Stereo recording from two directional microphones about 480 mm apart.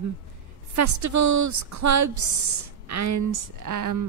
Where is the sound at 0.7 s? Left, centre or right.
Right.